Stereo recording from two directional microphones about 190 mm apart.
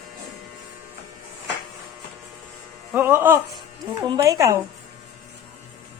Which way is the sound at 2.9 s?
10° right (ahead or behind).